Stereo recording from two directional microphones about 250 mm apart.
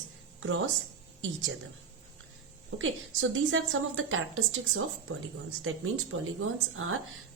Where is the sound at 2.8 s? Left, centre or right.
Right.